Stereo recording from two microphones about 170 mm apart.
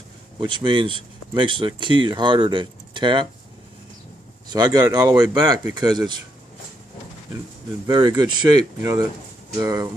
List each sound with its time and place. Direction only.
0.3 s speech: 30° right (ahead or behind)
4.4 s speech: 25° right (ahead or behind)
7.9 s speech: 25° right (ahead or behind)